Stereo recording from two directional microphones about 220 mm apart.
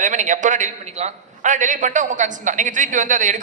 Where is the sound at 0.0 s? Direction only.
35° right (ahead or behind).